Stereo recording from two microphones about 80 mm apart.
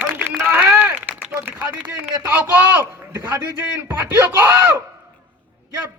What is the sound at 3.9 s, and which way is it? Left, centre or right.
Speech, right.